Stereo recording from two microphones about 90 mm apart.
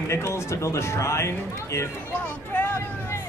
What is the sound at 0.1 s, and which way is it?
Speech, 30° left (ahead or behind).